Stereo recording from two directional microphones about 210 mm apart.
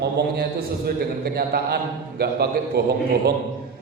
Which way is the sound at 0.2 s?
50° right (ahead or behind).